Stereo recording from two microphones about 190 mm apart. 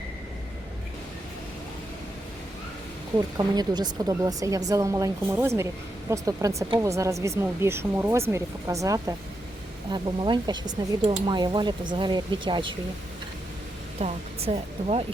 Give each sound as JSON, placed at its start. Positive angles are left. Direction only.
{"t": 3.3, "sound": "speech", "side_deg": -20}
{"t": 14.0, "sound": "speech", "side_deg": -35}